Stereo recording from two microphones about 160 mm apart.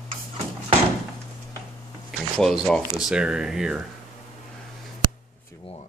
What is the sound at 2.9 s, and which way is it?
Speech, 5° right (ahead or behind).